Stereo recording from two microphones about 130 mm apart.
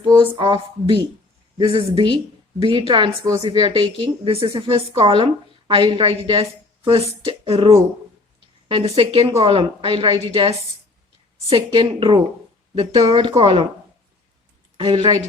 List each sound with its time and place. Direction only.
0.0 s a woman's voice: 35° right (ahead or behind)
3.4 s a woman's voice: 45° right (ahead or behind)
14.8 s a woman's voice: 45° right (ahead or behind)